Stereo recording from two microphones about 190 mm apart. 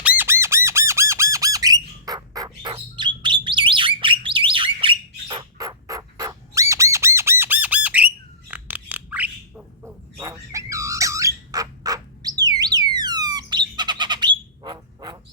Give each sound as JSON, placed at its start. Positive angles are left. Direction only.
{"t": 0.2, "sound": "squawk", "side_deg": -15}